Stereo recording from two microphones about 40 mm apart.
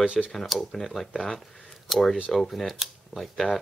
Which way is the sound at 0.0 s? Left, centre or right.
Right.